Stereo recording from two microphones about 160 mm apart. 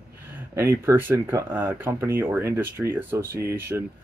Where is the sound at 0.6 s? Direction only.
15° right (ahead or behind).